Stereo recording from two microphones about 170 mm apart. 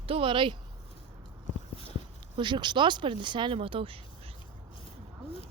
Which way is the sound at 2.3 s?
25° right (ahead or behind).